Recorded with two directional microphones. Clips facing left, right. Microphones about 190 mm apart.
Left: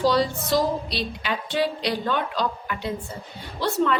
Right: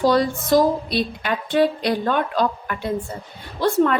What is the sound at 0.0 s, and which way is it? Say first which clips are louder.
A woman's voice: right 3 dB; 50° right (ahead or behind).